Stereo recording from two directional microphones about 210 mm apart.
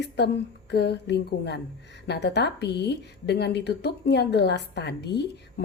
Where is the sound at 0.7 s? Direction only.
55° left (ahead or behind).